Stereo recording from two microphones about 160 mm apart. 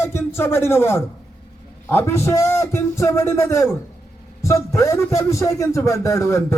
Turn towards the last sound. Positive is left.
turn(degrees=20)  # may be behind; listen again after turning